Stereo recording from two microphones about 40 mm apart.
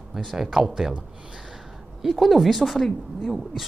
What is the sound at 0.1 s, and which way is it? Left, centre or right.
Speech, centre.